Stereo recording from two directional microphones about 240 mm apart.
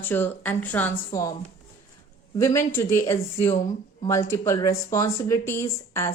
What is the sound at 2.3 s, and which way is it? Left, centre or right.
Speech, centre.